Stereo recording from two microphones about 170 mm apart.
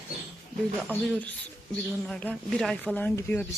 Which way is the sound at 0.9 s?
10° left (ahead or behind).